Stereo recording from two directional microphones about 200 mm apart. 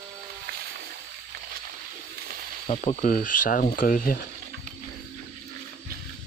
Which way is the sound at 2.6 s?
30° left (ahead or behind).